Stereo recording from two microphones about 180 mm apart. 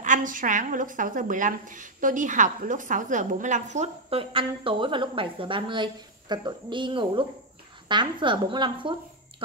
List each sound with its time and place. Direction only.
0.0 s speech: 45° right (ahead or behind); by 8.9 s 25° right (ahead or behind)